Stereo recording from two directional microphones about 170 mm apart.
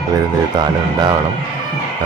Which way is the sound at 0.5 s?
25° right (ahead or behind).